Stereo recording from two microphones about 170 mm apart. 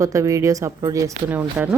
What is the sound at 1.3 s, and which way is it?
Speech, 10° right (ahead or behind).